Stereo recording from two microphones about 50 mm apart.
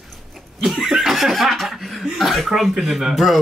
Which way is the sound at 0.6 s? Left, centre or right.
Centre.